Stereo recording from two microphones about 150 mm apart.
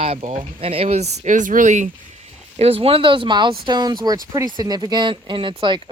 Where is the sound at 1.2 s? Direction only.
55° right (ahead or behind).